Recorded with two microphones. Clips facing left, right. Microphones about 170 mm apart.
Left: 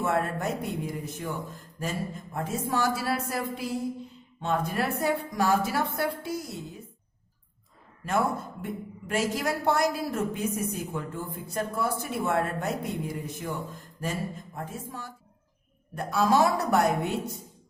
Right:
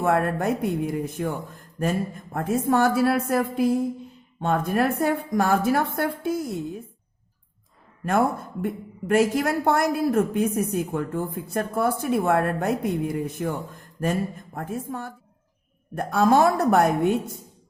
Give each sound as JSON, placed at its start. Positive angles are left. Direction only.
{"t": 0.0, "sound": "a woman's voice", "side_deg": -55}
{"t": 8.0, "sound": "a woman's voice", "side_deg": -55}